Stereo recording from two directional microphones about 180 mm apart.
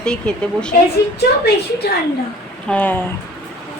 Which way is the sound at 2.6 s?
10° left (ahead or behind).